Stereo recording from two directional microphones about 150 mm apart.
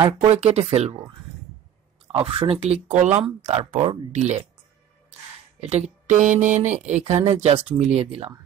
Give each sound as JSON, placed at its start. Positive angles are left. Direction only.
{"t": 0.3, "sound": "speech", "side_deg": -45}
{"t": 2.1, "sound": "speech", "side_deg": -35}
{"t": 5.6, "sound": "speech", "side_deg": -45}